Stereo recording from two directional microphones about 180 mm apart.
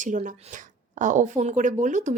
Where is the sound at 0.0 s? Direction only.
45° right (ahead or behind).